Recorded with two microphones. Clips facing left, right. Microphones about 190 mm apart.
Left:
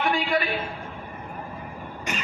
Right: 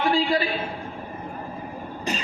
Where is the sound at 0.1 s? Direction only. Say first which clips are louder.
Right 4 dB; 30° right (ahead or behind).